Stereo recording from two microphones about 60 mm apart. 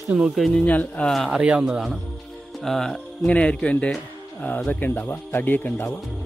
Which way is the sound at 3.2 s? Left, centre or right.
Centre.